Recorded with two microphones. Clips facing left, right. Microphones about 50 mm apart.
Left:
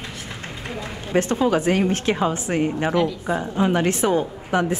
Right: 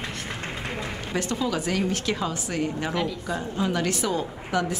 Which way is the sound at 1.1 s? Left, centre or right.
Left.